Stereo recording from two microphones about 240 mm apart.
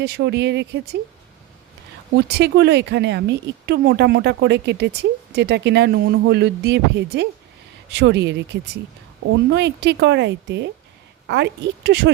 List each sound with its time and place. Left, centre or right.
0.0 s speech: right
2.1 s speech: right